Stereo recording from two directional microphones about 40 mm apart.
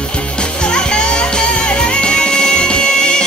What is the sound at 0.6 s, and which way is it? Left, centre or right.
Music, left.